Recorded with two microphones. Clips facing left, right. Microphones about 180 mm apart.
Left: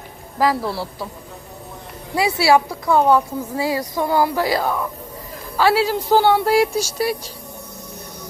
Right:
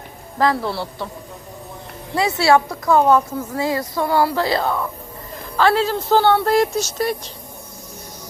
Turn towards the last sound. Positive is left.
turn(degrees=10)  # may be behind; listen again after turning